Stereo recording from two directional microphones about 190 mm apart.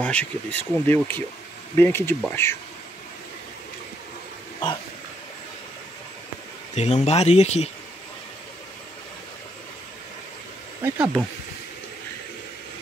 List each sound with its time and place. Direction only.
0.0 s speech: 10° left (ahead or behind)
6.7 s speech: 35° left (ahead or behind)
10.8 s speech: 5° right (ahead or behind)